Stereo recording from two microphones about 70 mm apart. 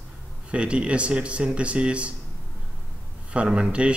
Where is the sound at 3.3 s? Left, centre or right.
Centre.